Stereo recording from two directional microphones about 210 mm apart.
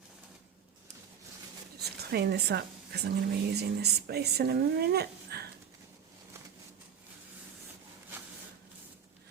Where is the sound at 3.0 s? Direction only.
50° right (ahead or behind).